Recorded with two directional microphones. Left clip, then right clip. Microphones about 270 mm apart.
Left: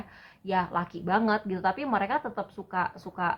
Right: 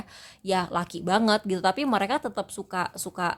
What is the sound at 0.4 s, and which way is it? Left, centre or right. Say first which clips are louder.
Speech: right 2 dB; right.